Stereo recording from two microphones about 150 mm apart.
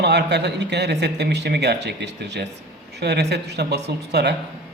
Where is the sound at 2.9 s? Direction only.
90° right.